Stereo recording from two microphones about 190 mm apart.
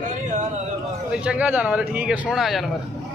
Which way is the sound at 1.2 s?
5° right (ahead or behind).